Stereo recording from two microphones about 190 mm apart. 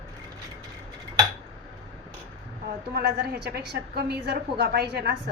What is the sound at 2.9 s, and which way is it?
A woman's voice, 55° right (ahead or behind).